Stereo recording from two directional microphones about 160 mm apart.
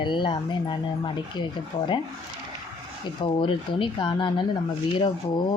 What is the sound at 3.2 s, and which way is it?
Speech, 30° left (ahead or behind).